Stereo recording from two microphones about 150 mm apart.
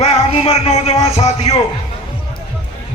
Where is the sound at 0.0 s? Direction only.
45° left (ahead or behind).